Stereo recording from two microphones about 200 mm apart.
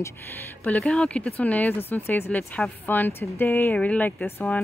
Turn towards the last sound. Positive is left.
turn(degrees=5)  # may be behind; listen again after turning